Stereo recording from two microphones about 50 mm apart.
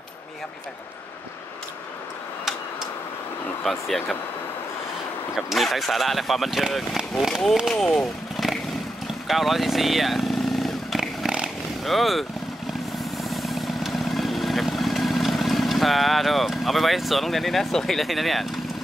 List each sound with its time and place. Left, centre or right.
3.6 s speech: centre
5.3 s speech: centre
7.8 s vehicle: centre
11.2 s vehicle: centre
11.8 s speech: centre
13.2 s vehicle: centre